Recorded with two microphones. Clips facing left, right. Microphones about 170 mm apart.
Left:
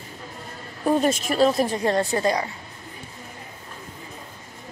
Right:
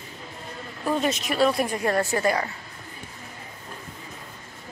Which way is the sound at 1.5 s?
25° left (ahead or behind).